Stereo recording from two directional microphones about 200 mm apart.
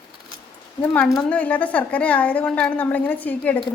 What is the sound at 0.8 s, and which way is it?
A woman's voice, 10° left (ahead or behind).